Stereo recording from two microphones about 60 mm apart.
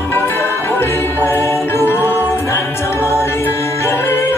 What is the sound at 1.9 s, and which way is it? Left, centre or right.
A capella, left.